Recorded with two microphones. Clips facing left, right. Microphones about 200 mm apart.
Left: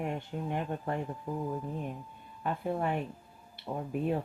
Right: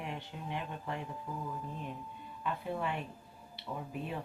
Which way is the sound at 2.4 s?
50° left (ahead or behind).